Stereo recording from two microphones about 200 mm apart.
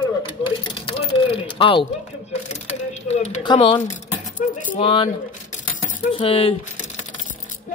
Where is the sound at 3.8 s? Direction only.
35° left (ahead or behind).